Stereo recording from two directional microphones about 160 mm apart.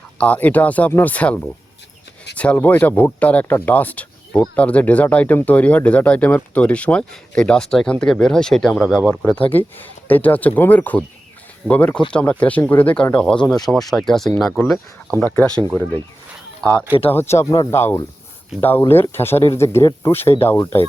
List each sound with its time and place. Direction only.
0.2 s speech: 10° left (ahead or behind)
16.6 s speech: 5° left (ahead or behind)